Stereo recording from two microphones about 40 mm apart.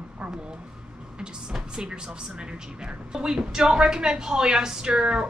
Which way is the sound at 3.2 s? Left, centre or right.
Centre.